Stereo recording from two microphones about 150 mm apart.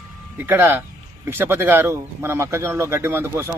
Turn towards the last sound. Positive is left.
turn(degrees=-15)  # may be behind; listen again after turning